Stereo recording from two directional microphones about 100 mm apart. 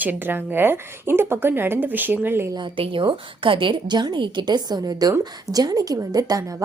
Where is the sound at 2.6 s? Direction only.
60° right (ahead or behind).